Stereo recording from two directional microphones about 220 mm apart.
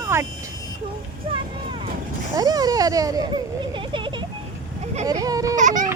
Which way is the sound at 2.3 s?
15° right (ahead or behind).